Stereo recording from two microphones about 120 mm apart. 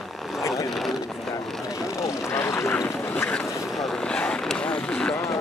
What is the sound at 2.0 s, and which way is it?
Vehicle, 25° left (ahead or behind).